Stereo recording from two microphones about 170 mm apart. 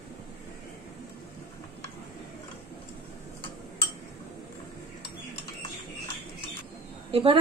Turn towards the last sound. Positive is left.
turn(degrees=-35)  # may be behind; listen again after turning